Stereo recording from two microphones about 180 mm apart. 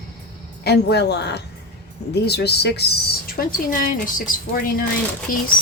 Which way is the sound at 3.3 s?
50° left (ahead or behind).